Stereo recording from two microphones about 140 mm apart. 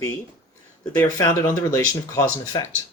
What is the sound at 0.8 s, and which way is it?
Speech, 20° left (ahead or behind).